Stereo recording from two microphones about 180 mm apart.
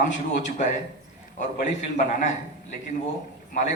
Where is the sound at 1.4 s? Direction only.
40° left (ahead or behind).